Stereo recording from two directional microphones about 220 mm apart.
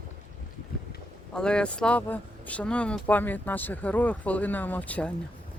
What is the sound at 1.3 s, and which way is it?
Speech, 5° left (ahead or behind).